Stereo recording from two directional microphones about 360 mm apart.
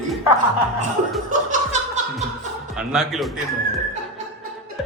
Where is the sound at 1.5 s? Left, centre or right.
Centre.